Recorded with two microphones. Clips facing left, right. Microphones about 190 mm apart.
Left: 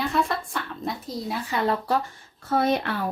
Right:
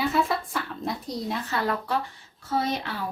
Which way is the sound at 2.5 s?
55° left (ahead or behind).